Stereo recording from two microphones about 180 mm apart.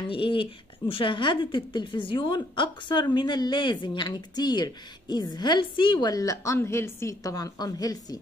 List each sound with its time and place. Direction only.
0.1 s speech: 30° left (ahead or behind)